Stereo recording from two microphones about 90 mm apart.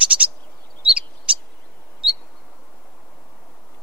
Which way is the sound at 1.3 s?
15° right (ahead or behind).